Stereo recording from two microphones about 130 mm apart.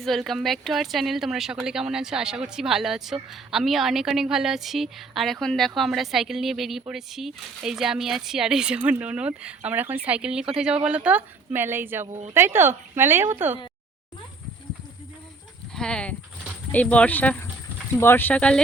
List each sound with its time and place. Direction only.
0.0 s speech: centre (ahead or behind); by 13.6 s 15° right (ahead or behind)
15.7 s speech: 5° left (ahead or behind)